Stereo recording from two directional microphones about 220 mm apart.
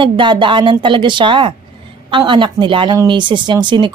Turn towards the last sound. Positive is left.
turn(degrees=-20)  # may be behind; listen again after turning